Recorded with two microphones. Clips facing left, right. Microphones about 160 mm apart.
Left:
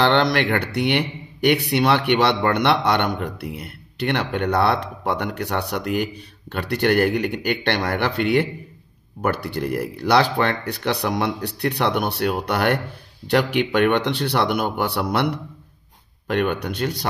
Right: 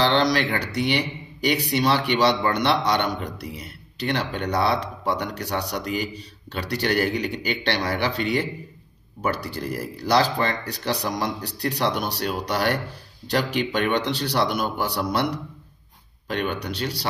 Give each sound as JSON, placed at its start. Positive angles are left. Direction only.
{"t": 0.0, "sound": "speech", "side_deg": 60}